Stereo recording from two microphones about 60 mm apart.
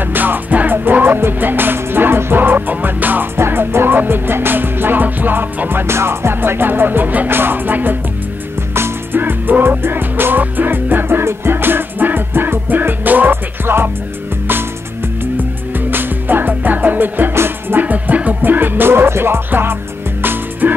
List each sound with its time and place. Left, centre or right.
0.0 s music: right
15.9 s music: right